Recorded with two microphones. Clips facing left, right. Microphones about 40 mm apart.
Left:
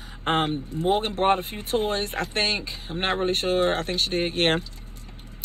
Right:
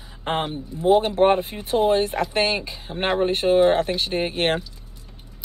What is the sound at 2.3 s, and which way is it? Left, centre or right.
Speech, right.